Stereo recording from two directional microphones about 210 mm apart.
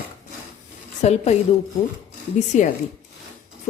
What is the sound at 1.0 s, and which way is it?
Speech, 30° left (ahead or behind).